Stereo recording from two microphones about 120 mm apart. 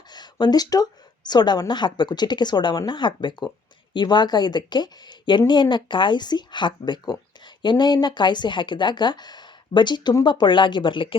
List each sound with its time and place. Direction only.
0.1 s speech: 35° left (ahead or behind)